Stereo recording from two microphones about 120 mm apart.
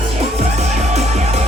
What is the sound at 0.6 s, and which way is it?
Music, 65° right (ahead or behind).